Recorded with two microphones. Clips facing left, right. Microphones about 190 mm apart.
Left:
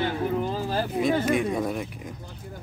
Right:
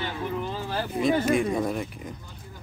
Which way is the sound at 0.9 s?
Centre (ahead or behind).